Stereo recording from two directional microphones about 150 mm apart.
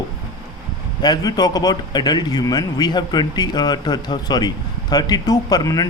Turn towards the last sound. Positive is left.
turn(degrees=25)  # may be behind; listen again after turning